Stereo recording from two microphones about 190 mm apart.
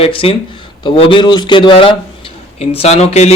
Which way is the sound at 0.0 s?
30° left (ahead or behind).